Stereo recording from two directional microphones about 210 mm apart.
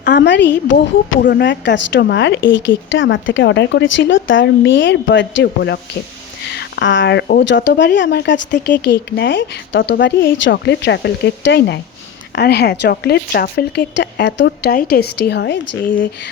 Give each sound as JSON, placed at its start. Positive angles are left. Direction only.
{"t": 0.0, "sound": "a woman's voice", "side_deg": 40}
{"t": 1.2, "sound": "a woman's voice", "side_deg": 50}